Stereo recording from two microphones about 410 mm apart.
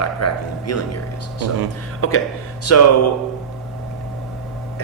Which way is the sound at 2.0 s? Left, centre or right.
Left.